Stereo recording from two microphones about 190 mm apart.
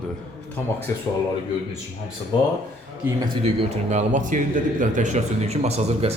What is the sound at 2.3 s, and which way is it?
Speech, 25° left (ahead or behind).